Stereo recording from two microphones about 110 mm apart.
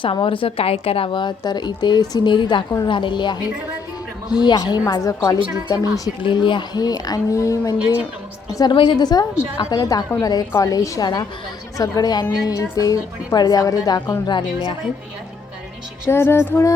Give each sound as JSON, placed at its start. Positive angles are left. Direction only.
{"t": 0.0, "sound": "a woman's voice", "side_deg": 50}
{"t": 6.2, "sound": "a woman's voice", "side_deg": 45}
{"t": 8.5, "sound": "a woman's voice", "side_deg": 45}
{"t": 16.0, "sound": "music", "side_deg": 20}